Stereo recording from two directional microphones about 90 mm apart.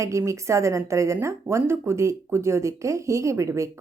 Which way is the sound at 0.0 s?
35° right (ahead or behind).